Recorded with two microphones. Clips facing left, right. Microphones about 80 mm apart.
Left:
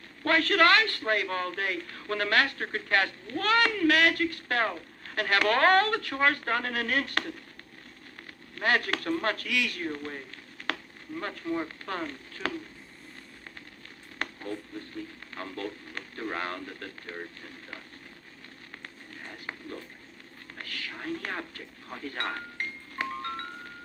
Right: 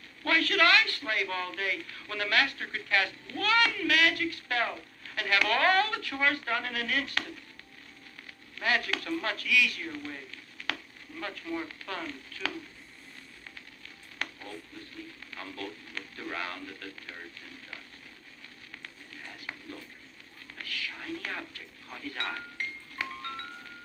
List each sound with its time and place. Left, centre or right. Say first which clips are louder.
0.3 s a man's voice: left 3 dB; left
8.5 s speech: left 3 dB; left
14.2 s a sound: left 3 dB; left
15.4 s speech: left 4 dB; left
18.8 s a sound: left 2 dB; left
20.6 s chink: left 1 dB; left